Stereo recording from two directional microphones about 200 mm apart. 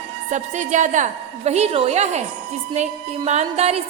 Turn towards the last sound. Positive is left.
turn(degrees=-30)  # may be behind; listen again after turning